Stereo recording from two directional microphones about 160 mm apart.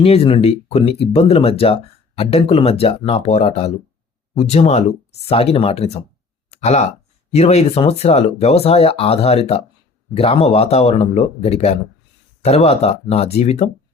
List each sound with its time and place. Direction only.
0.0 s speech: 40° left (ahead or behind)
6.5 s a sound: 45° left (ahead or behind)
7.3 s speech: 40° left (ahead or behind)